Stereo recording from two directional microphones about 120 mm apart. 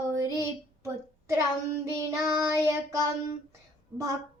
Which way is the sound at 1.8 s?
25° right (ahead or behind).